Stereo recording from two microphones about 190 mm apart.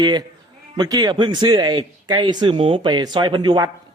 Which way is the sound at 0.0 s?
20° right (ahead or behind).